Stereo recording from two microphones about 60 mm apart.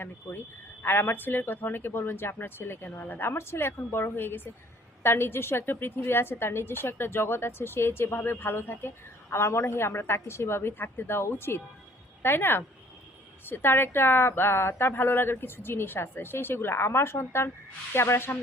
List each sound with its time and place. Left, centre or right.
0.8 s a woman's voice: left
3.2 s a woman's voice: left